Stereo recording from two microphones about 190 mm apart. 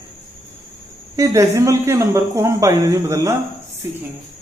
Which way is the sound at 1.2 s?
15° right (ahead or behind).